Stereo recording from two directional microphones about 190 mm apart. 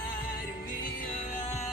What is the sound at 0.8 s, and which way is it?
Music, 45° left (ahead or behind).